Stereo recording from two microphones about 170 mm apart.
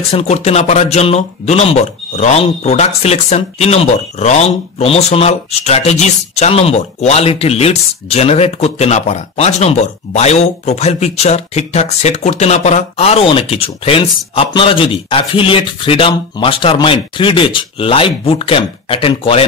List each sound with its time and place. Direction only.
0.1 s speech: 40° left (ahead or behind)